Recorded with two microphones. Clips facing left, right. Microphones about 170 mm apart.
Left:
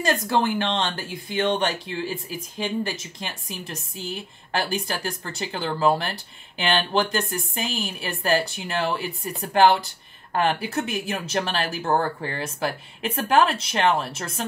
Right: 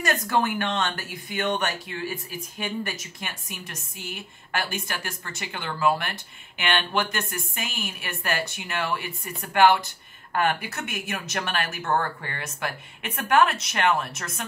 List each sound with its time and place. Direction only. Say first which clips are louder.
0.0 s speech: left 2 dB; 25° left (ahead or behind)